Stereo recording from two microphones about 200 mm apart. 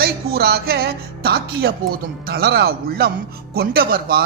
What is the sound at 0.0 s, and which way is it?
Speech, 50° right (ahead or behind).